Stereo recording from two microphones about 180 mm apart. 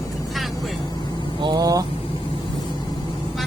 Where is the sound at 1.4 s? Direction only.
25° right (ahead or behind).